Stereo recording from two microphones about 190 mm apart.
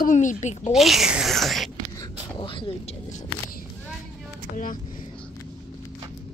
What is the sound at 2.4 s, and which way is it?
Speech, 25° left (ahead or behind).